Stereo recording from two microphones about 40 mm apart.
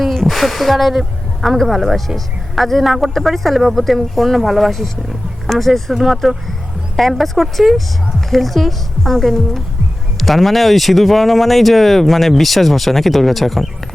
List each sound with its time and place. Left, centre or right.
0.3 s speech: centre
5.9 s speech: centre